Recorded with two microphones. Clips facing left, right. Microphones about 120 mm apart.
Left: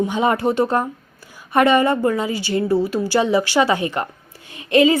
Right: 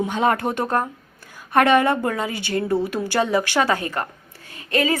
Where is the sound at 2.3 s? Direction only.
55° right (ahead or behind).